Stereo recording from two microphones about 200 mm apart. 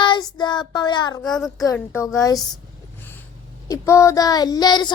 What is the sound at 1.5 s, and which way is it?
Speech, 15° left (ahead or behind).